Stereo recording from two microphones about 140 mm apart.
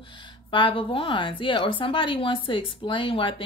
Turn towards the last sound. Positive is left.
turn(degrees=35)  # may be behind; listen again after turning